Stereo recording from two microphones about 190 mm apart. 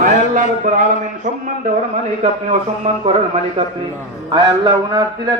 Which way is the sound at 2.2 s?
35° right (ahead or behind).